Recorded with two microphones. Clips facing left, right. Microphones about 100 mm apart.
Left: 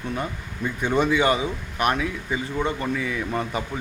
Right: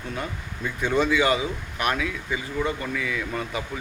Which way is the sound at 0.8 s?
15° left (ahead or behind).